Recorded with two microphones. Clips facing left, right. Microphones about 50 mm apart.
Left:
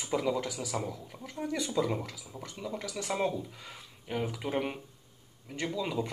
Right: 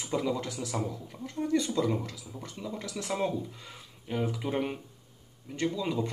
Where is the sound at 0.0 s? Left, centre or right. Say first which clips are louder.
Even; centre.